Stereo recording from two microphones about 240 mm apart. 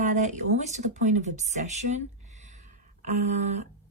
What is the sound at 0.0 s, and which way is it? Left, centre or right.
A woman's voice, right.